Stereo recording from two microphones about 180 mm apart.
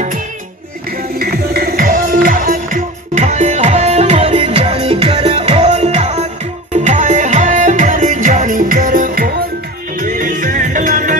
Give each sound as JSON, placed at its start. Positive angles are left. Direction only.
{"t": 1.2, "sound": "music", "side_deg": -60}